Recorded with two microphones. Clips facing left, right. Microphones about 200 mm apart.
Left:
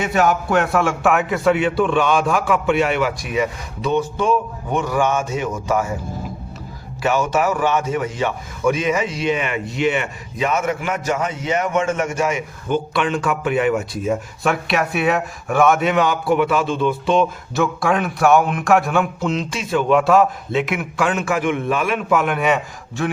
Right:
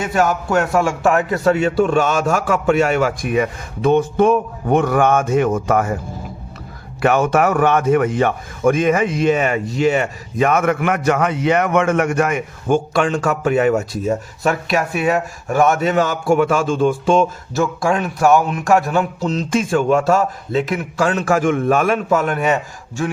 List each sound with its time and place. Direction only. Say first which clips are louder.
0.0 s speech: even; 45° right (ahead or behind)
7.0 s speech: right 4 dB; 55° right (ahead or behind)